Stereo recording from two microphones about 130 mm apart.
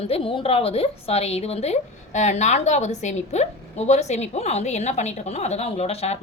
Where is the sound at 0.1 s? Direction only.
45° left (ahead or behind).